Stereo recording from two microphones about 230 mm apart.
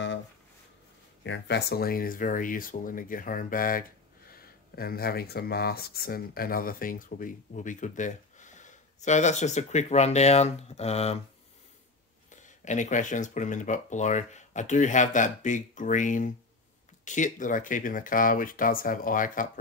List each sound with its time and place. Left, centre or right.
1.2 s speech: left
12.3 s speech: left